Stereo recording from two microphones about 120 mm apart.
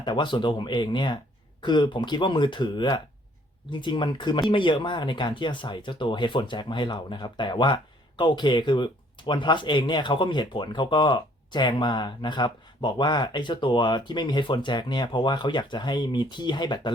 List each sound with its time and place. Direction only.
0.0 s speech: 40° left (ahead or behind)